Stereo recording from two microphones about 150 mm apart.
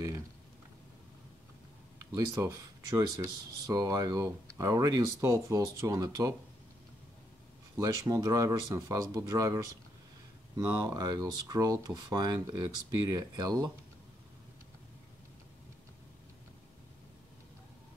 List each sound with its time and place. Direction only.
2.0 s speech: 20° right (ahead or behind)
7.7 s speech: 20° right (ahead or behind)